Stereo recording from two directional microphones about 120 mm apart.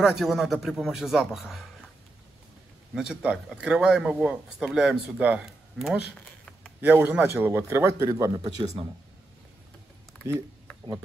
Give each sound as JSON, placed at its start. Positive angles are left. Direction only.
{"t": 0.0, "sound": "a man's voice", "side_deg": -5}
{"t": 2.9, "sound": "a man's voice", "side_deg": -5}
{"t": 6.8, "sound": "a man's voice", "side_deg": -15}